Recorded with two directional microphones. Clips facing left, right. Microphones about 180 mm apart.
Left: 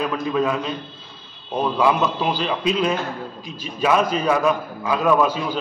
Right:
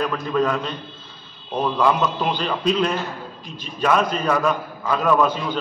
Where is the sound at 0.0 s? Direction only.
5° left (ahead or behind).